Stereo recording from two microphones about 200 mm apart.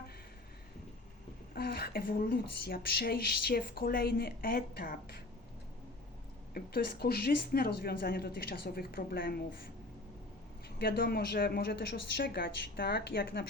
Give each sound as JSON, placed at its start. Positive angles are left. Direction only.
{"t": 1.5, "sound": "speech", "side_deg": 50}
{"t": 6.5, "sound": "speech", "side_deg": 50}
{"t": 10.8, "sound": "speech", "side_deg": 50}